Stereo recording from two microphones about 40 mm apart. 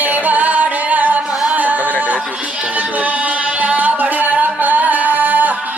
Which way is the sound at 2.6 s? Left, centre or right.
Right.